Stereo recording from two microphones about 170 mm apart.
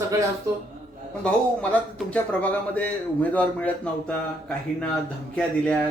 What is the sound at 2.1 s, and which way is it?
A man's voice, 10° left (ahead or behind).